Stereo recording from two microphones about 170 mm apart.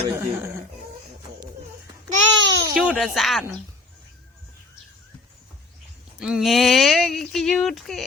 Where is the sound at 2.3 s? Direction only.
90° right.